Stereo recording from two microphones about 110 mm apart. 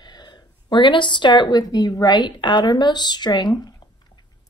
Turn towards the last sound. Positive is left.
turn(degrees=40)  # may be behind; listen again after turning